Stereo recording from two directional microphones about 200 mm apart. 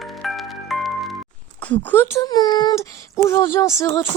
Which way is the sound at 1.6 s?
10° left (ahead or behind).